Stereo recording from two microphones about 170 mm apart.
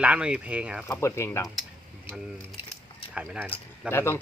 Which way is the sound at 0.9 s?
15° left (ahead or behind).